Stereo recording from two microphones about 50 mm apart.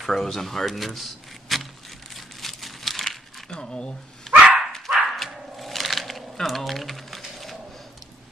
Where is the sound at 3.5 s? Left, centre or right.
Centre.